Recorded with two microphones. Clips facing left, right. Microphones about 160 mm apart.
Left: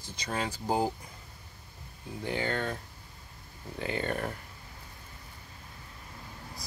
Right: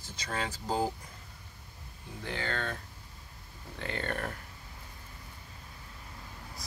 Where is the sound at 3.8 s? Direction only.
10° left (ahead or behind).